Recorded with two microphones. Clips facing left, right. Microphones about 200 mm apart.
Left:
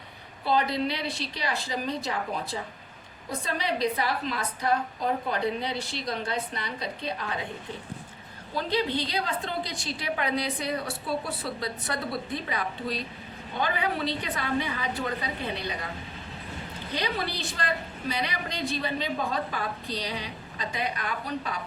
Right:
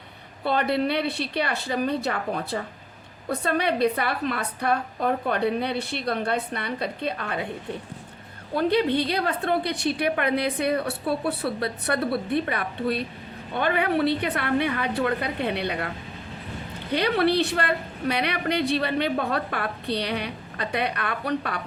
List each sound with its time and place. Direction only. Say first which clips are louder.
0.4 s a woman's voice: right 3 dB; 60° right (ahead or behind)
8.5 s a woman's voice: right 6 dB; 60° right (ahead or behind)
16.9 s a woman's voice: right 10 dB; 65° right (ahead or behind)